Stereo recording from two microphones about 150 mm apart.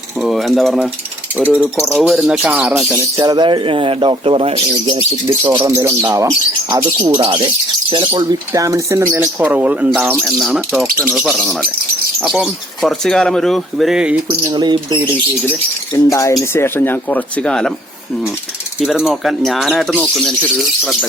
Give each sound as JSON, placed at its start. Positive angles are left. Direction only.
{"t": 0.2, "sound": "speech", "side_deg": 0}
{"t": 1.4, "sound": "speech", "side_deg": -10}
{"t": 1.7, "sound": "speech", "side_deg": 5}
{"t": 3.2, "sound": "speech", "side_deg": -30}
{"t": 5.3, "sound": "speech", "side_deg": -20}
{"t": 14.3, "sound": "speech", "side_deg": -30}
{"t": 15.4, "sound": "speech", "side_deg": 15}
{"t": 18.8, "sound": "speech", "side_deg": -5}